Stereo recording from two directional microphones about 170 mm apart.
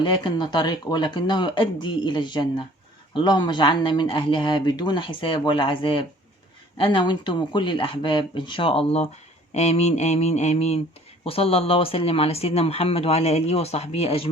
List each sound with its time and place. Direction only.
0.0 s speech: 25° left (ahead or behind)